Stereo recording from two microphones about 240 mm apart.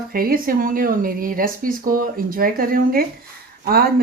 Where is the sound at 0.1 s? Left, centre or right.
Right.